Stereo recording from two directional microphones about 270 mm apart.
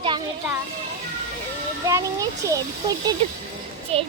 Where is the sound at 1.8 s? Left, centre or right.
Centre.